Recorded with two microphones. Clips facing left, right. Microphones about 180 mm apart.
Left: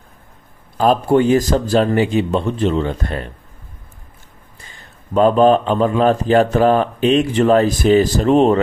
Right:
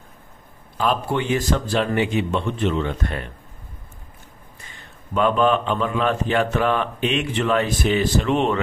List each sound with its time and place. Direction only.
0.7 s speech: 40° left (ahead or behind)
5.1 s speech: 35° left (ahead or behind)